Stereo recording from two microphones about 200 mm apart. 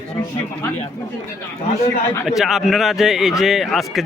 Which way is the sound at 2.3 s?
Centre (ahead or behind).